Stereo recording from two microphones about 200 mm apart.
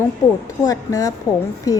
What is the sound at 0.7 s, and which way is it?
Speech, 15° left (ahead or behind).